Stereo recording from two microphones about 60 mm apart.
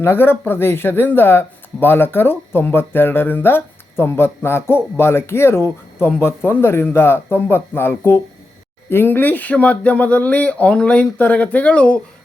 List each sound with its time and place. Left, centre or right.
0.0 s speech: left